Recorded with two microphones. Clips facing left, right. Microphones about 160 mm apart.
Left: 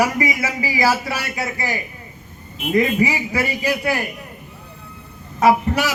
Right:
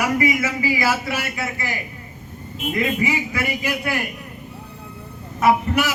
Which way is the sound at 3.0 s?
35° left (ahead or behind).